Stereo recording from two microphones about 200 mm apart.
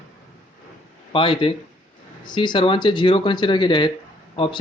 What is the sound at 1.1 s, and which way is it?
Speech, 25° left (ahead or behind).